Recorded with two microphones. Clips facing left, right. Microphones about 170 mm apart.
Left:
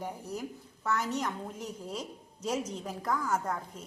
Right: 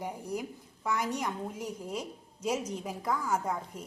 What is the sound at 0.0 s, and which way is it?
A woman's voice, 10° right (ahead or behind).